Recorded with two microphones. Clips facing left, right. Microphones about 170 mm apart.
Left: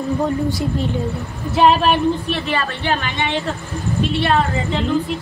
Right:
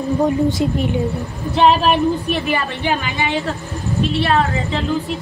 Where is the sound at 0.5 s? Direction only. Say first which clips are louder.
Right 3 dB; 20° right (ahead or behind).